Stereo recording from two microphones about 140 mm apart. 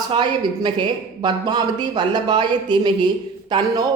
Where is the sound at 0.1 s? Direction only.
35° right (ahead or behind).